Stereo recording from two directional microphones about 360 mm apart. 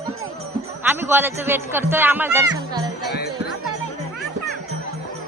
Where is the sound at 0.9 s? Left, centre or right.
Centre.